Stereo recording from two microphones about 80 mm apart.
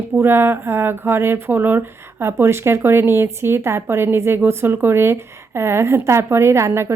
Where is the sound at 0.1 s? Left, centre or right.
Right.